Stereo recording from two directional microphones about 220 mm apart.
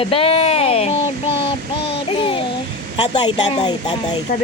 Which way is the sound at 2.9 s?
20° left (ahead or behind).